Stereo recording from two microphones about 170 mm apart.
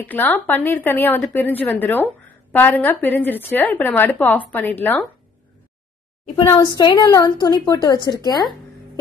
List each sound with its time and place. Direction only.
0.0 s a woman's voice: 10° left (ahead or behind)
6.4 s a woman's voice: 20° left (ahead or behind)